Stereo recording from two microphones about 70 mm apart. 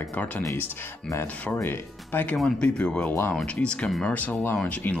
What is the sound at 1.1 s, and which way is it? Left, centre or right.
Speech, left.